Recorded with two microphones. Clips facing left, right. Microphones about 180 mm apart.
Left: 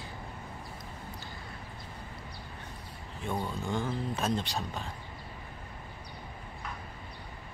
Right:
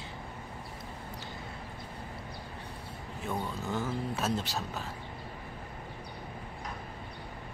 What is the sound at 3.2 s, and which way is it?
Speech, 5° right (ahead or behind).